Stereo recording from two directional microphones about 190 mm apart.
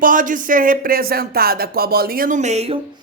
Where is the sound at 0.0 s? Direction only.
45° right (ahead or behind).